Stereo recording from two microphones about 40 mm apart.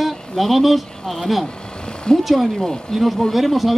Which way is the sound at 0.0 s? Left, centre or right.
Centre.